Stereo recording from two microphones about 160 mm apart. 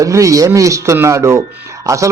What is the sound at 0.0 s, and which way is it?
Speech, 20° right (ahead or behind).